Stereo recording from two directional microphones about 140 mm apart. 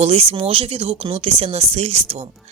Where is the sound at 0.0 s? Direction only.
45° right (ahead or behind).